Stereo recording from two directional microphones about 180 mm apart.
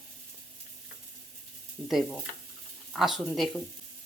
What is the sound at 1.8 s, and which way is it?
Speech, centre (ahead or behind).